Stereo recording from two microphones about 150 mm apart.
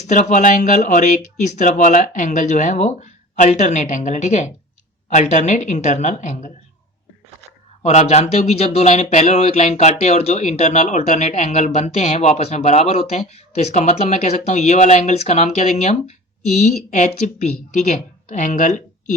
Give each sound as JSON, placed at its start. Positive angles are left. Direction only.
{"t": 0.0, "sound": "speech", "side_deg": 50}
{"t": 7.9, "sound": "speech", "side_deg": 50}